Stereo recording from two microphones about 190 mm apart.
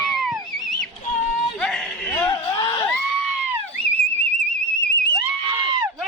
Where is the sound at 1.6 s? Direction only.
5° left (ahead or behind).